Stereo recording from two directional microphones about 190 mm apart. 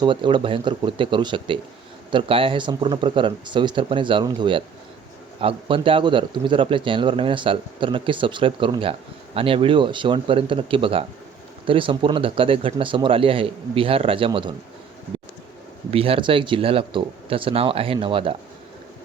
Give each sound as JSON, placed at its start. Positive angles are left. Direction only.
{"t": 0.0, "sound": "speech", "side_deg": -25}
{"t": 15.9, "sound": "speech", "side_deg": -30}